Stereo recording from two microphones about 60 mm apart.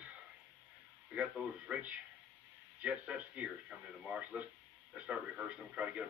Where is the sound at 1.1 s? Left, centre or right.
Right.